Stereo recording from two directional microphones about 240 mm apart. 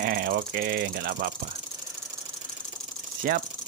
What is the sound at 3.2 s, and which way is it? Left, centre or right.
Speech, right.